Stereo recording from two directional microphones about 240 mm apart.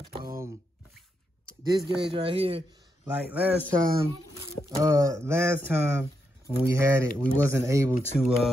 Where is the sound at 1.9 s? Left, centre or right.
Right.